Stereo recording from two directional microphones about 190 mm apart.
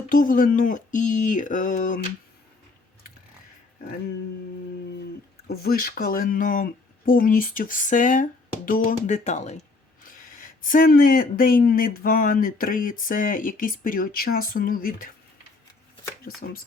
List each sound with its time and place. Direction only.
0.1 s speech: 45° left (ahead or behind)
5.5 s speech: 55° left (ahead or behind)
16.3 s speech: 45° left (ahead or behind)